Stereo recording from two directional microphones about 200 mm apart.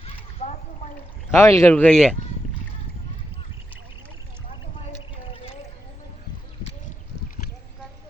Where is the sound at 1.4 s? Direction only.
10° left (ahead or behind).